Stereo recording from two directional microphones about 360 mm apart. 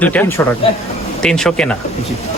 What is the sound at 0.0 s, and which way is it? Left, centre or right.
Speech, centre.